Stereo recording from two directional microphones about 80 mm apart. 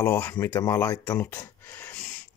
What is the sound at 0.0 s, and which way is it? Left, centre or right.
Speech, left.